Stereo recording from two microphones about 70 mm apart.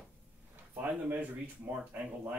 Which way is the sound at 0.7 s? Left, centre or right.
Right.